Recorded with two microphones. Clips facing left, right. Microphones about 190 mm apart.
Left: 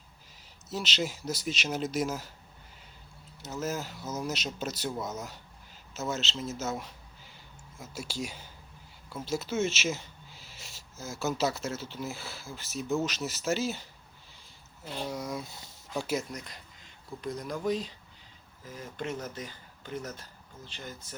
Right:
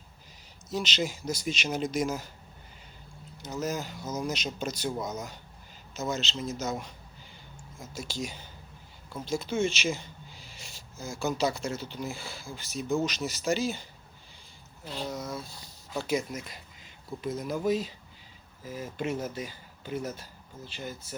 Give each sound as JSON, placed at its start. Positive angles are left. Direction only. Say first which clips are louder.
{"t": 0.7, "sound": "speech", "louder": "right 2 dB", "side_deg": 0}
{"t": 3.4, "sound": "speech", "louder": "right 1 dB", "side_deg": 0}
{"t": 15.0, "sound": "speech", "louder": "even", "side_deg": 10}
{"t": 16.0, "sound": "speech", "louder": "right 2 dB", "side_deg": 5}
{"t": 16.3, "sound": "speech", "louder": "right 3 dB", "side_deg": -5}